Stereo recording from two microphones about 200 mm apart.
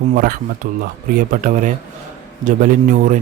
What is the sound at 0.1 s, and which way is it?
Speech, 45° right (ahead or behind).